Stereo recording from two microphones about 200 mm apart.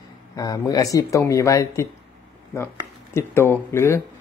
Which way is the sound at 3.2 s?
10° left (ahead or behind).